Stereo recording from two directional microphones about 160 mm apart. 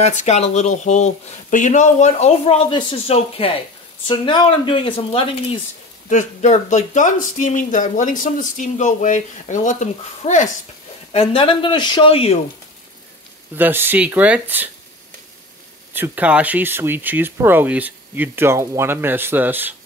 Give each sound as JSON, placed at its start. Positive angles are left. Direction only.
{"t": 0.0, "sound": "speech", "side_deg": 45}
{"t": 6.0, "sound": "speech", "side_deg": 45}
{"t": 11.1, "sound": "speech", "side_deg": 35}
{"t": 13.6, "sound": "speech", "side_deg": -15}
{"t": 15.9, "sound": "speech", "side_deg": -10}